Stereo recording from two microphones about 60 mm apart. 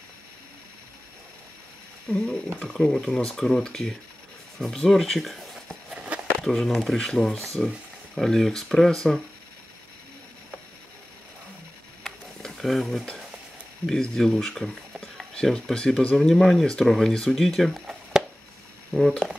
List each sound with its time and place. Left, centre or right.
2.0 s speech: centre
5.9 s a sound: right
6.4 s speech: centre
12.0 s a sound: centre
13.8 s speech: centre
16.2 s speech: centre
18.9 s speech: centre